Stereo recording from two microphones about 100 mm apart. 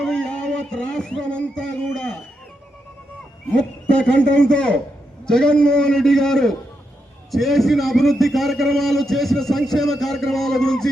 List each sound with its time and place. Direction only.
0.0 s music: 5° left (ahead or behind)
3.6 s a man's voice: 10° left (ahead or behind)